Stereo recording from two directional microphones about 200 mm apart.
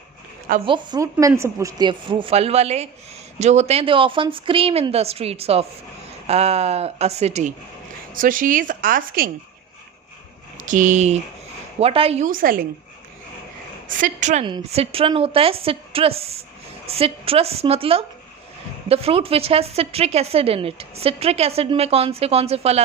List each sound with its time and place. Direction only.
0.6 s a woman's voice: 25° right (ahead or behind); by 9.3 s 45° right (ahead or behind)
10.6 s speech: 40° right (ahead or behind)
13.8 s a woman's voice: 40° right (ahead or behind)
14.4 s a woman's voice: 25° right (ahead or behind)